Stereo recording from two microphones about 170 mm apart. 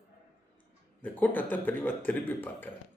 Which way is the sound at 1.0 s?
10° left (ahead or behind).